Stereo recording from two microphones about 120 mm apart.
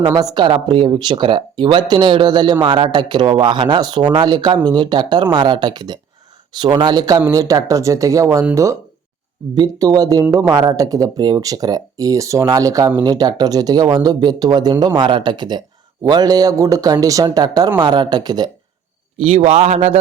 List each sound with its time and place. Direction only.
0.0 s speech: 30° right (ahead or behind)
9.6 s speech: 30° right (ahead or behind)
19.2 s a man's voice: 60° right (ahead or behind)